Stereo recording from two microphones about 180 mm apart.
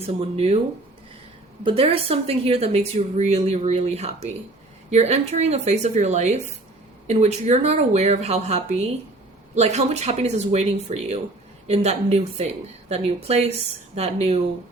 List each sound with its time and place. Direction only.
0.0 s speech: 35° right (ahead or behind)
1.6 s speech: 30° right (ahead or behind)